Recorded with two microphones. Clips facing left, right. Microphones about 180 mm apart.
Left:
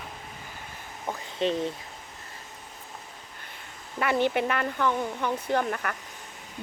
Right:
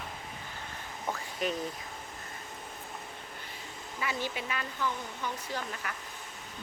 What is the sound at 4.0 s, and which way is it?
Speech, 65° left (ahead or behind).